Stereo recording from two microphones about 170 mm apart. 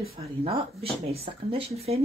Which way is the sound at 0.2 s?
35° right (ahead or behind).